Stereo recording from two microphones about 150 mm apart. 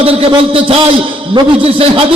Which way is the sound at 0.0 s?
40° right (ahead or behind).